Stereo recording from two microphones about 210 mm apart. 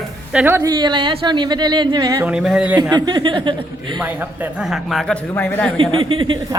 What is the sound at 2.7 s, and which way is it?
A woman's voice, 20° right (ahead or behind).